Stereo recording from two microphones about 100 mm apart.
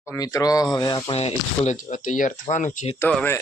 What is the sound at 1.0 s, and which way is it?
Speech, 90° left.